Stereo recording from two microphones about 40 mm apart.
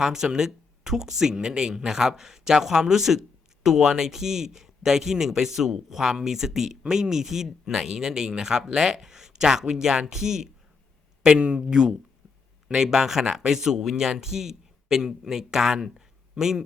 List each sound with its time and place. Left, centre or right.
0.0 s a man's voice: centre